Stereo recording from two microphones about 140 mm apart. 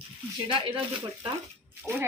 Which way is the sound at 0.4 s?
35° right (ahead or behind).